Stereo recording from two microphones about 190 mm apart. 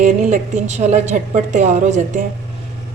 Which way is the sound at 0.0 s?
40° right (ahead or behind).